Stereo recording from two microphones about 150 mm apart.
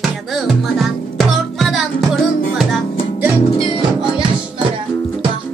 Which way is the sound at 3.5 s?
40° left (ahead or behind).